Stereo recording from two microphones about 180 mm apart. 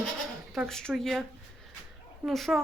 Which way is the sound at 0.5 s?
Centre (ahead or behind).